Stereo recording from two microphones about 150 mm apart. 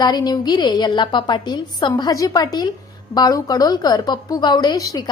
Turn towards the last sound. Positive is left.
turn(degrees=25)  # may be behind; listen again after turning